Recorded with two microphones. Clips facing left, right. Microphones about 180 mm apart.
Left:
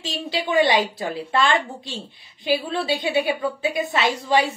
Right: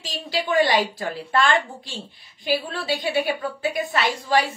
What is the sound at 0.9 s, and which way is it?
A woman's voice, 25° left (ahead or behind).